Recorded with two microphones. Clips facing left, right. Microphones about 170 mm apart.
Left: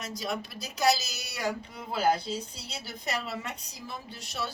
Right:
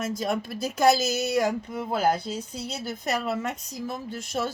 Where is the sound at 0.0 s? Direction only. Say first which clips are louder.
Right 7 dB; 50° right (ahead or behind).